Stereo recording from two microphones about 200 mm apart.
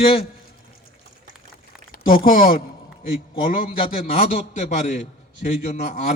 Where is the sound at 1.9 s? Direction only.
45° left (ahead or behind).